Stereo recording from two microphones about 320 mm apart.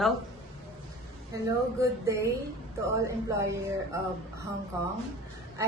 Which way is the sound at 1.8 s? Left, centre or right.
Centre.